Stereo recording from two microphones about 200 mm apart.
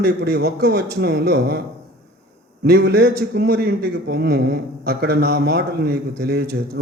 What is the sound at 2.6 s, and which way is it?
Speech, 50° right (ahead or behind).